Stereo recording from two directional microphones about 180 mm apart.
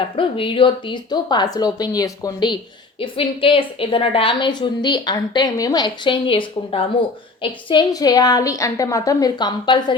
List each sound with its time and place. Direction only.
0.2 s a woman's voice: 30° left (ahead or behind)